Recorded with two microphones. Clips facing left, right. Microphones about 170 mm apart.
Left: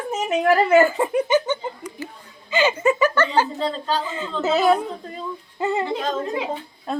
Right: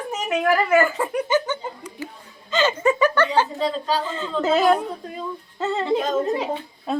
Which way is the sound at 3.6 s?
10° right (ahead or behind).